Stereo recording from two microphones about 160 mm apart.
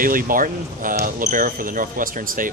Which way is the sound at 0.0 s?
60° right (ahead or behind).